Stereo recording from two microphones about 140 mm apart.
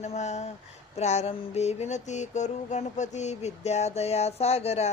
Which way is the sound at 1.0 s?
50° left (ahead or behind).